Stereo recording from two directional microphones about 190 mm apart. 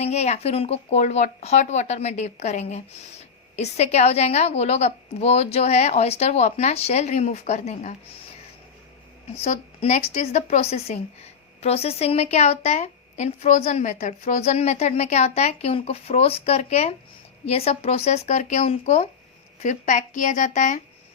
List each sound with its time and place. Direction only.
0.0 s speech: 35° left (ahead or behind)
9.4 s speech: 40° left (ahead or behind)